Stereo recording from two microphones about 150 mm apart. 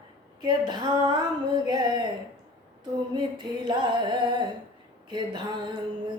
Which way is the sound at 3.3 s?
30° right (ahead or behind).